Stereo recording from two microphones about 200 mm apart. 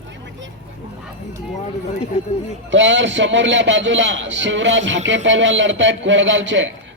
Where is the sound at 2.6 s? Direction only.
65° right (ahead or behind).